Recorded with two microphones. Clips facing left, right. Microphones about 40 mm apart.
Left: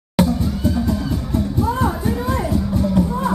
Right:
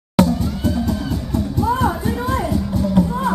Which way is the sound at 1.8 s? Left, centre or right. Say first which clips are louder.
Right 1 dB; centre.